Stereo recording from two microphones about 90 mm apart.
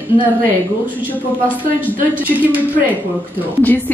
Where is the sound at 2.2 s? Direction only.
20° right (ahead or behind).